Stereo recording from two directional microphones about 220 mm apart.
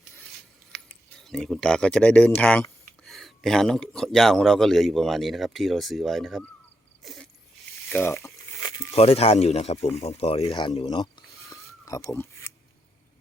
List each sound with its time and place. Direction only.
1.2 s speech: centre (ahead or behind)
7.0 s a sound: centre (ahead or behind)
8.9 s speech: 30° left (ahead or behind)
10.4 s speech: 15° left (ahead or behind)